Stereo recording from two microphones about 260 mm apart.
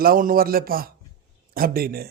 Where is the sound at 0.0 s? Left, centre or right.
Right.